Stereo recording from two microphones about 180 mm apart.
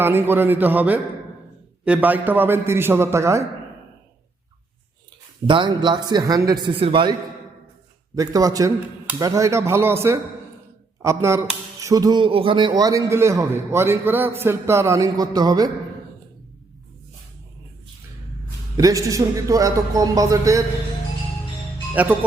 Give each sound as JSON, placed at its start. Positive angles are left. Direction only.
{"t": 0.0, "sound": "a man's voice", "side_deg": -10}
{"t": 5.5, "sound": "a man's voice", "side_deg": -25}
{"t": 18.8, "sound": "a man's voice", "side_deg": -20}
{"t": 21.9, "sound": "a man's voice", "side_deg": -10}